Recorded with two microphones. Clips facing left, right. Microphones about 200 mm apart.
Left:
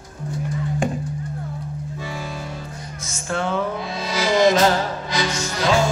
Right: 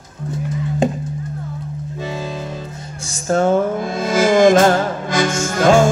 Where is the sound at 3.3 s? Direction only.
45° right (ahead or behind).